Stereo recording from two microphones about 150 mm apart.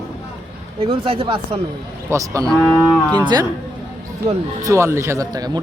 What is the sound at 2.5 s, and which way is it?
Cattle, 5° left (ahead or behind).